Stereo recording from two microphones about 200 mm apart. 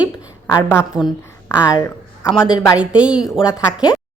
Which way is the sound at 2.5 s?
15° left (ahead or behind).